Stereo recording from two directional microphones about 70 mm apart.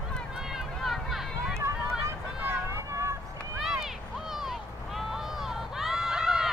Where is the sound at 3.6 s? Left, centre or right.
Centre.